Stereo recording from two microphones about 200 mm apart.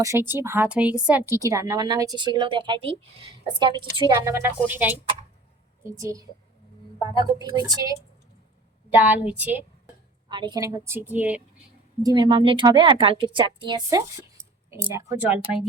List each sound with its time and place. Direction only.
0.0 s a woman's voice: 10° right (ahead or behind)
10.2 s a woman's voice: 25° right (ahead or behind); by 11.4 s 5° right (ahead or behind)
12.0 s a woman's voice: 20° right (ahead or behind)